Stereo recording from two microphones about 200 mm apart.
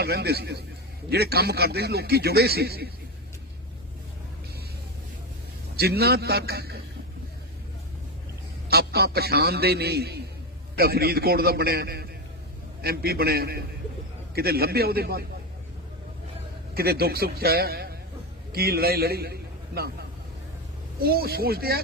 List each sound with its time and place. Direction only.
0.0 s a man's voice: 55° right (ahead or behind)
5.7 s a man's voice: 50° right (ahead or behind)
8.7 s a man's voice: 50° right (ahead or behind)
16.7 s a man's voice: 50° right (ahead or behind)